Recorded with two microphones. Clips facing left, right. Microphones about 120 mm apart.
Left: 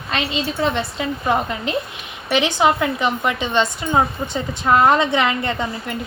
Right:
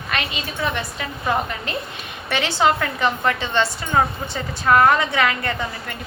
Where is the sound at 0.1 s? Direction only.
25° left (ahead or behind).